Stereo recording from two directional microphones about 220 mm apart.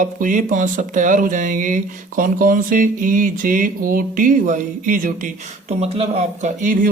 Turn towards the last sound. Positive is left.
turn(degrees=-35)  # may be behind; listen again after turning